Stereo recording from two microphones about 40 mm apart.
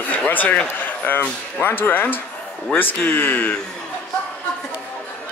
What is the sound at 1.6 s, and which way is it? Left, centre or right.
Speech, left.